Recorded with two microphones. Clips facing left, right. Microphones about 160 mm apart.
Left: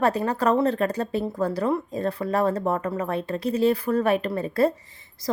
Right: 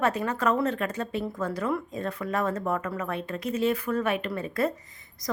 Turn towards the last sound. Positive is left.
turn(degrees=30)  # may be behind; listen again after turning